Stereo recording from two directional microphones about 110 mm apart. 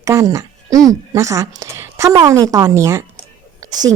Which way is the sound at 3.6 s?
35° right (ahead or behind).